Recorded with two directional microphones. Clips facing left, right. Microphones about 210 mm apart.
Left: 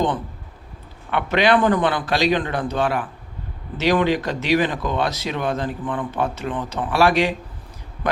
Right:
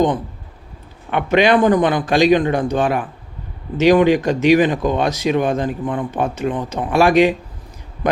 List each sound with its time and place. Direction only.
1.1 s a man's voice: 15° right (ahead or behind)